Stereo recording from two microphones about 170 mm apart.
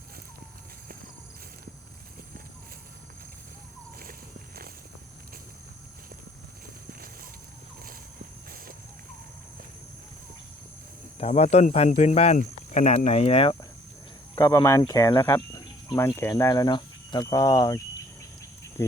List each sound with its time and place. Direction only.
11.2 s speech: 35° left (ahead or behind)
14.3 s speech: 20° left (ahead or behind)